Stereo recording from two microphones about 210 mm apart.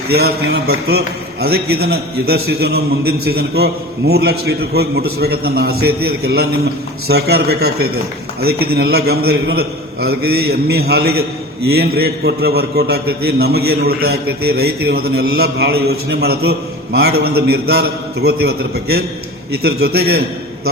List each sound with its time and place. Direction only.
0.1 s a man's voice: 50° right (ahead or behind)